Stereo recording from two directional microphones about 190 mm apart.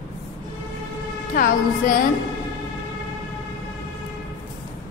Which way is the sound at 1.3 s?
45° left (ahead or behind).